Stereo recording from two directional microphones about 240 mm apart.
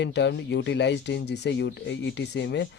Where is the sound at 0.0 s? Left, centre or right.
Left.